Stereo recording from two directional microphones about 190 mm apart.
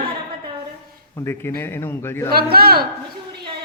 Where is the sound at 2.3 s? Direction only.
55° right (ahead or behind).